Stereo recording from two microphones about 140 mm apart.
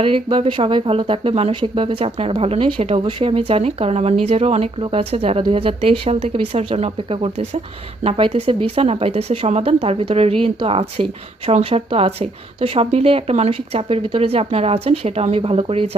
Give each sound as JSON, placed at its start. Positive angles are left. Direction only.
{"t": 0.0, "sound": "speech", "side_deg": -40}